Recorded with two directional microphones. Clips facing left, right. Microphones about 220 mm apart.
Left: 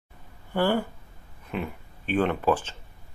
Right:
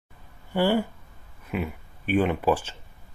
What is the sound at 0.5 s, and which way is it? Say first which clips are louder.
Speech: right 2 dB; 10° right (ahead or behind).